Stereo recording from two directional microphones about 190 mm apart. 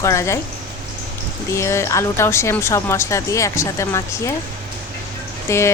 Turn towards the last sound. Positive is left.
turn(degrees=15)  # may be behind; listen again after turning